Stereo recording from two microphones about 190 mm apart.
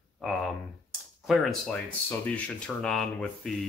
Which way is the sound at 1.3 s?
Centre (ahead or behind).